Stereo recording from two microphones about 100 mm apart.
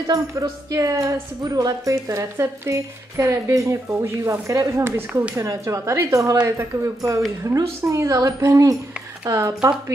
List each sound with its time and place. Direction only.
0.0 s speech: 40° right (ahead or behind)